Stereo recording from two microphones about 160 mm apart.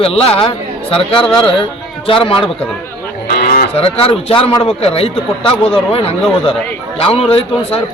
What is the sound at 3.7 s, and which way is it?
A man's voice, 35° left (ahead or behind).